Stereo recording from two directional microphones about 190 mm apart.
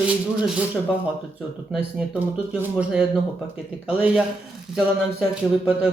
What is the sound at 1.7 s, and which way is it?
Speech, 5° right (ahead or behind).